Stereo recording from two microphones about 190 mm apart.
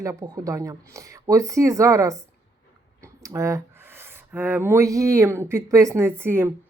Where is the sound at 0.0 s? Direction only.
15° right (ahead or behind).